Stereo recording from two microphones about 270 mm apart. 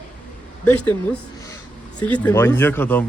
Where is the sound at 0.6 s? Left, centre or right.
Centre.